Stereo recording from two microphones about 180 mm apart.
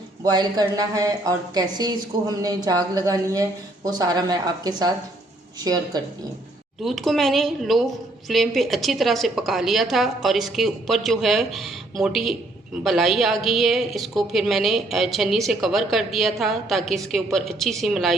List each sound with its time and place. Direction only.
0.3 s a woman's voice: 20° right (ahead or behind)
6.8 s a woman's voice: centre (ahead or behind)